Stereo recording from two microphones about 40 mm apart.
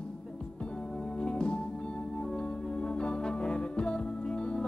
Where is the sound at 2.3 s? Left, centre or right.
Left.